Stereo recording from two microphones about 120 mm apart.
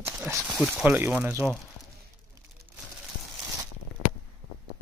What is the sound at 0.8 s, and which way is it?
Speech, 15° right (ahead or behind).